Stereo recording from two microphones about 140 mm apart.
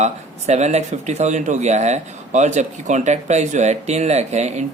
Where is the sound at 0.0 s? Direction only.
55° right (ahead or behind).